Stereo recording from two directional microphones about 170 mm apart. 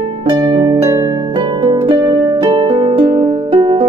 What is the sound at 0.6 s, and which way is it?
Harp, 25° right (ahead or behind).